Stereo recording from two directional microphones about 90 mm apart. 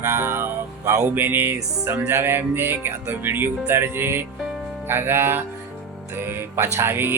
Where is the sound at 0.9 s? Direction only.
25° right (ahead or behind).